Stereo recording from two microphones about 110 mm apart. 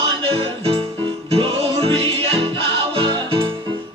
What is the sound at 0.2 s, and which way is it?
Music, 60° right (ahead or behind).